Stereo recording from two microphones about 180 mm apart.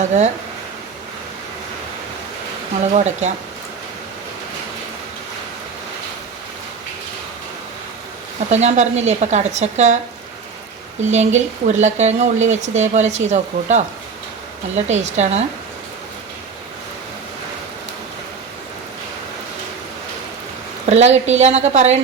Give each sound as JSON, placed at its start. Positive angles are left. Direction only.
{"t": 0.0, "sound": "speech", "side_deg": -40}
{"t": 2.8, "sound": "speech", "side_deg": -40}
{"t": 8.4, "sound": "speech", "side_deg": -40}
{"t": 11.1, "sound": "speech", "side_deg": -40}
{"t": 20.8, "sound": "speech", "side_deg": -40}